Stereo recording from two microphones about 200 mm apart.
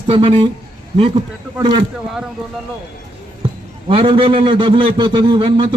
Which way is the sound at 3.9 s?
30° right (ahead or behind).